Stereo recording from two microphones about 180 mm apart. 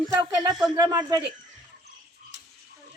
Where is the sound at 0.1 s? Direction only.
20° right (ahead or behind).